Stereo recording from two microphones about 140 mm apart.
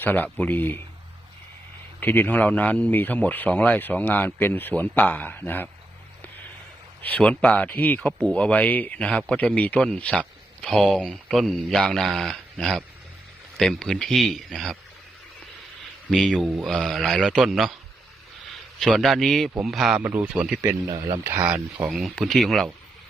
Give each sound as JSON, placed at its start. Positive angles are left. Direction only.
{"t": 0.0, "sound": "speech", "side_deg": 10}
{"t": 2.0, "sound": "speech", "side_deg": 15}
{"t": 7.0, "sound": "speech", "side_deg": 10}
{"t": 16.0, "sound": "speech", "side_deg": 5}
{"t": 18.8, "sound": "speech", "side_deg": 0}
{"t": 20.6, "sound": "speech", "side_deg": -25}
{"t": 21.5, "sound": "speech", "side_deg": -5}